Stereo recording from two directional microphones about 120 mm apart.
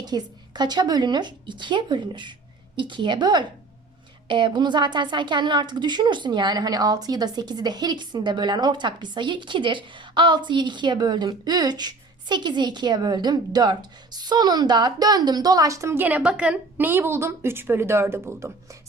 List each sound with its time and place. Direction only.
0.0 s a woman's voice: 35° right (ahead or behind)